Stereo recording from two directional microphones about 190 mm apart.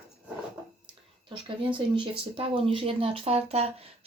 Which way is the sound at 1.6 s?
25° right (ahead or behind).